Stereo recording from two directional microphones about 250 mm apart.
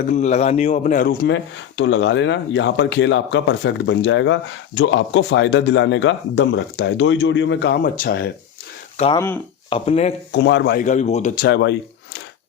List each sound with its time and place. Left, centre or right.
0.1 s speech: left
9.0 s speech: left
10.3 s speech: left
11.4 s speech: left